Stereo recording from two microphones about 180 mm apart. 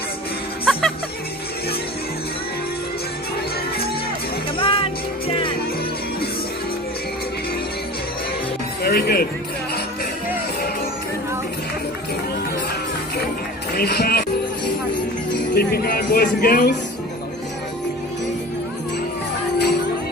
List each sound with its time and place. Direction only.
0.6 s music: centre (ahead or behind)
4.5 s music: 30° left (ahead or behind)
8.8 s music: 60° left (ahead or behind)
13.7 s music: 60° left (ahead or behind)
15.3 s speech: 60° left (ahead or behind)